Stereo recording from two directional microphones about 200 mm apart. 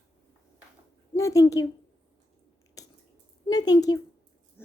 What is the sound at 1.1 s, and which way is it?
Speech, 15° left (ahead or behind).